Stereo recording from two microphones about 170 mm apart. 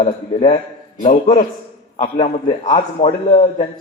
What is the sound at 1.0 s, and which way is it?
Speech, 50° left (ahead or behind).